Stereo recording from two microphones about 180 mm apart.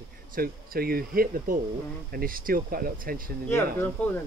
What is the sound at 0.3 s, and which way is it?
Speech, 55° right (ahead or behind).